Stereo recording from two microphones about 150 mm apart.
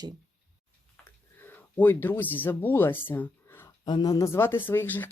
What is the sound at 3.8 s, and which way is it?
Speech, 30° left (ahead or behind).